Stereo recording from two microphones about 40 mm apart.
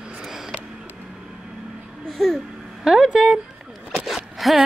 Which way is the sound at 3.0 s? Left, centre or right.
Centre.